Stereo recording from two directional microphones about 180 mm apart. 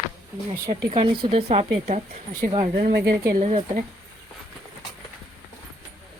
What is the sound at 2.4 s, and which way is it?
Speech, 50° right (ahead or behind).